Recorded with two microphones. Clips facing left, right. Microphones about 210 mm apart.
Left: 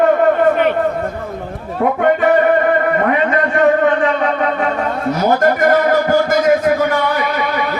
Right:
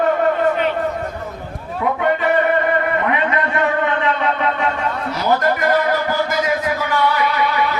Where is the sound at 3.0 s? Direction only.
45° left (ahead or behind).